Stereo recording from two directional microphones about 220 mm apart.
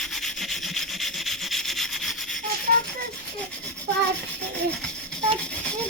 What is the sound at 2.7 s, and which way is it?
Rattle, 40° right (ahead or behind).